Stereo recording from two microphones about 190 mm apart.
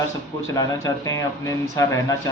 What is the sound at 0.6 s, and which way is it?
Speech, 15° left (ahead or behind).